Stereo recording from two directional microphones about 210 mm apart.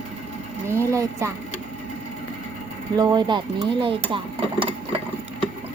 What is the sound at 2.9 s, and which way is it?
Speech, 20° right (ahead or behind).